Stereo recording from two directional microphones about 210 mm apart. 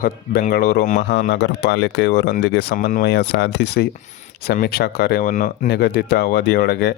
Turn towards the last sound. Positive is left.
turn(degrees=50)  # may be behind; listen again after turning